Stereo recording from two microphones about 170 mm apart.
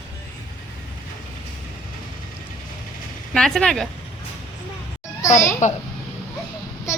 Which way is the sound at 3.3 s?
5° left (ahead or behind).